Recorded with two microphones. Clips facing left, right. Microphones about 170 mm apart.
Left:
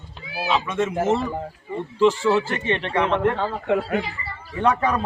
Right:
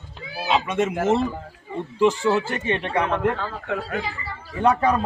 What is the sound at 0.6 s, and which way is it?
Speech, 20° right (ahead or behind).